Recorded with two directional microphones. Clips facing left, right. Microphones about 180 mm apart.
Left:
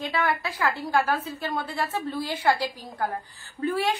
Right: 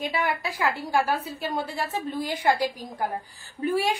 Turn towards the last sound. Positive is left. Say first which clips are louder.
# right 1 dB
turn(degrees=-10)  # may be behind; listen again after turning